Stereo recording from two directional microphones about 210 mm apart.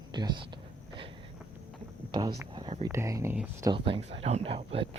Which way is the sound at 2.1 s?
20° right (ahead or behind).